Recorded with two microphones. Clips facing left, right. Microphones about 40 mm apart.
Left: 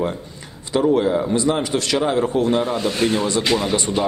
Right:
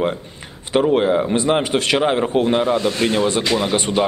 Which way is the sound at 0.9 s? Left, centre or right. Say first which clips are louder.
Right 2 dB; right.